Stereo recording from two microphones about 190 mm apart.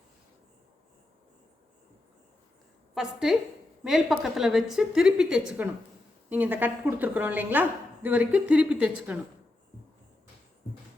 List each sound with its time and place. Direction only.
2.9 s a woman's voice: centre (ahead or behind)